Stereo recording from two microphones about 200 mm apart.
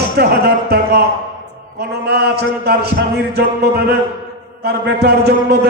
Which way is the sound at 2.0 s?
55° right (ahead or behind).